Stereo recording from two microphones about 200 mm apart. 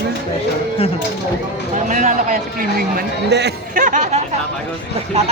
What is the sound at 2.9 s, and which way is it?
Speech, 50° right (ahead or behind).